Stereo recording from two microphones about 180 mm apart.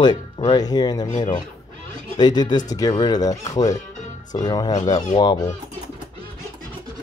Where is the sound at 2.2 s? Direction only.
25° left (ahead or behind).